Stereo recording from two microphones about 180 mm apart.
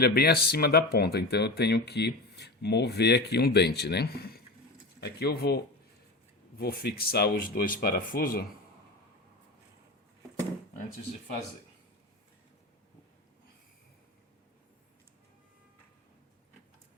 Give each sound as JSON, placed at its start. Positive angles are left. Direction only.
{"t": 0.0, "sound": "speech", "side_deg": 60}